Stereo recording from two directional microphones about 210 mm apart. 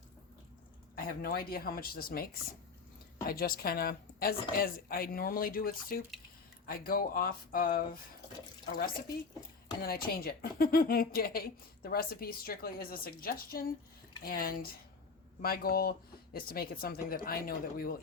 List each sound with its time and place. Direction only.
0.9 s speech: 45° left (ahead or behind)
9.8 s speech: 45° left (ahead or behind)